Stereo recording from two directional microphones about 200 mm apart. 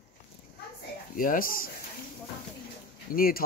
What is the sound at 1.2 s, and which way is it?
Speech, 45° left (ahead or behind).